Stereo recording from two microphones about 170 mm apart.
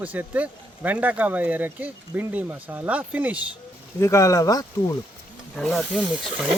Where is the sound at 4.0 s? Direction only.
20° left (ahead or behind).